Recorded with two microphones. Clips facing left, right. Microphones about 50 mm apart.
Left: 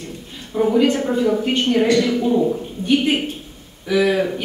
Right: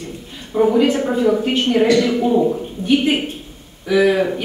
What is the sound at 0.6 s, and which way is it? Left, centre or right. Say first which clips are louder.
A woman's voice: right 2 dB; centre.